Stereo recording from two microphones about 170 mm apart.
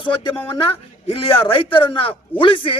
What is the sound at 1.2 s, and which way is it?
A man's voice, 30° left (ahead or behind).